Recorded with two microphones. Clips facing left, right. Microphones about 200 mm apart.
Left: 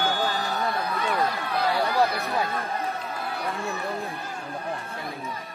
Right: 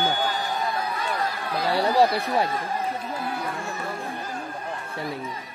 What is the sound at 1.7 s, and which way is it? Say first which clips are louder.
Speech: right 6 dB; 30° right (ahead or behind).